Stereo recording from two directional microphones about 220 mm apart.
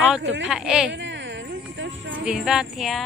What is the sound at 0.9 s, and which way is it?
Music, 55° right (ahead or behind).